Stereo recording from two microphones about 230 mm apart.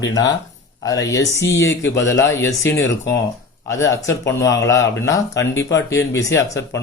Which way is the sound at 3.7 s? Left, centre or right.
Centre.